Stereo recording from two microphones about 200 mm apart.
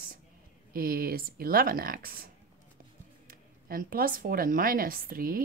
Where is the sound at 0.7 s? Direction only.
45° right (ahead or behind).